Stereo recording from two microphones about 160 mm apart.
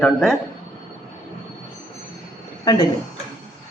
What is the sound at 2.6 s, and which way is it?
Speech, 25° left (ahead or behind).